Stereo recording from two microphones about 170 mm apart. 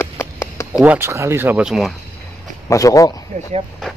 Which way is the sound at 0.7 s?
10° right (ahead or behind).